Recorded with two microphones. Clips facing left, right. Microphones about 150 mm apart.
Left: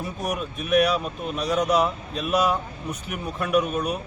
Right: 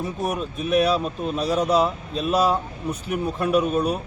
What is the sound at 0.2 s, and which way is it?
Speech, 30° right (ahead or behind).